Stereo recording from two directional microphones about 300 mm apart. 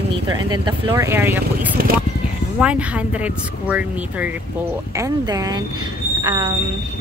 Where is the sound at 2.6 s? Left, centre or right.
Centre.